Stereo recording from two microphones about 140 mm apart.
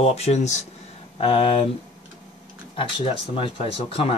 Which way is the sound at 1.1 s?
40° left (ahead or behind).